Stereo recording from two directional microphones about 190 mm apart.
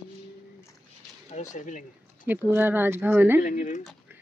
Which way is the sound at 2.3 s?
10° right (ahead or behind).